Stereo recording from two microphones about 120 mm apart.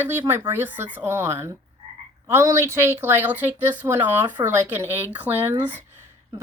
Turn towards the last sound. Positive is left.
turn(degrees=-15)  # may be behind; listen again after turning